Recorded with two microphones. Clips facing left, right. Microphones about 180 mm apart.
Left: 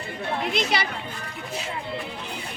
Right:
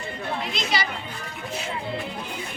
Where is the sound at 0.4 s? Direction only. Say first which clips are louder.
Left 4 dB; 60° left (ahead or behind).